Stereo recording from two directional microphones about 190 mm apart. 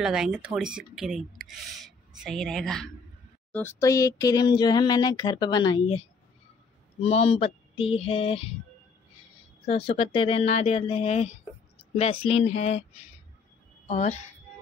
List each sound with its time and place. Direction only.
0.0 s speech: 5° right (ahead or behind)
3.5 s speech: 15° left (ahead or behind); by 8.5 s 30° left (ahead or behind)
9.7 s speech: 30° left (ahead or behind)
13.8 s speech: 40° left (ahead or behind)